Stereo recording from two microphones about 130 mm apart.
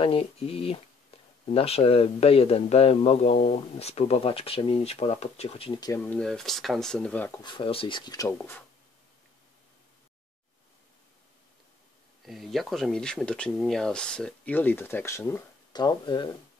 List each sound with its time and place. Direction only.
0.0 s speech: 45° left (ahead or behind)
5.9 s speech: 15° left (ahead or behind)
6.2 s speech: 5° left (ahead or behind)
7.4 s speech: 40° left (ahead or behind)
8.4 s speech: 15° left (ahead or behind)
12.3 s speech: centre (ahead or behind); by 15.4 s 20° left (ahead or behind)
15.7 s speech: 30° left (ahead or behind)